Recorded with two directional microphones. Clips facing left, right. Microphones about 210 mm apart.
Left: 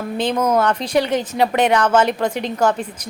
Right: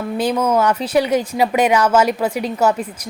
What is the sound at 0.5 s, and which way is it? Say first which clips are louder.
Speech: right 1 dB; 10° right (ahead or behind).